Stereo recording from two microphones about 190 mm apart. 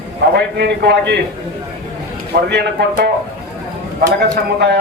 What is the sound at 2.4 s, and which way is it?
Speech, 60° right (ahead or behind).